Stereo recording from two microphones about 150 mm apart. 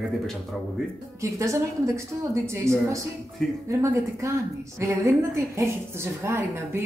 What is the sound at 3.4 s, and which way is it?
Speech, centre (ahead or behind).